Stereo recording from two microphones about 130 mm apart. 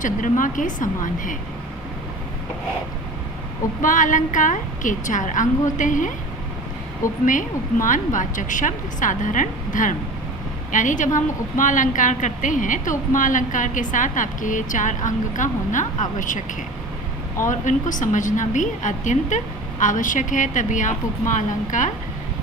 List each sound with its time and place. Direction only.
0.0 s a woman's voice: 90° left
3.8 s a woman's voice: 90° left
7.3 s a woman's voice: 90° left
17.5 s a woman's voice: 75° left (ahead or behind)